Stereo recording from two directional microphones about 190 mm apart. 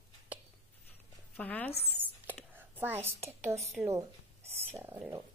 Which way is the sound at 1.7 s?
30° left (ahead or behind).